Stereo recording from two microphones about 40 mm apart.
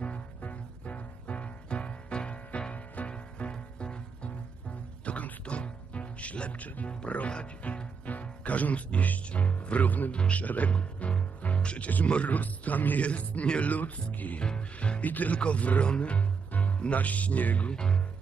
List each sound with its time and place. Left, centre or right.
0.4 s music: left
6.9 s speech: left
10.7 s music: left
12.3 s speech: left
14.8 s speech: left
17.6 s speech: left